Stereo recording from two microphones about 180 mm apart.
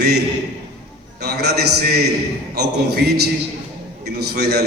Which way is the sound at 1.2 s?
65° right (ahead or behind).